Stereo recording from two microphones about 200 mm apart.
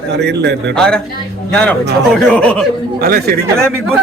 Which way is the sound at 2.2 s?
5° left (ahead or behind).